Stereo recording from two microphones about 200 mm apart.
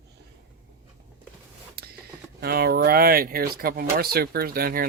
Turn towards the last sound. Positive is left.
turn(degrees=-45)  # may be behind; listen again after turning